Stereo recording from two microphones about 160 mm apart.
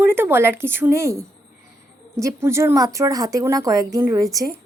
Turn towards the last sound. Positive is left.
turn(degrees=-20)  # may be behind; listen again after turning